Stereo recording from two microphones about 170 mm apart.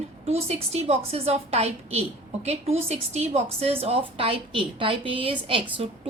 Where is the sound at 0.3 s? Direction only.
40° right (ahead or behind).